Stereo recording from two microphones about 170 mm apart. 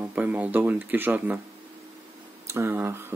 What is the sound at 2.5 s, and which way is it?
Speech, 15° right (ahead or behind).